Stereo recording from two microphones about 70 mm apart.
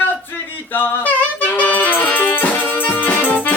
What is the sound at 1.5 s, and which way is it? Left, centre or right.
Music, left.